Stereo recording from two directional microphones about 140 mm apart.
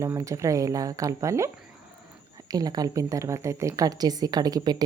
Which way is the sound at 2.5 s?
25° right (ahead or behind).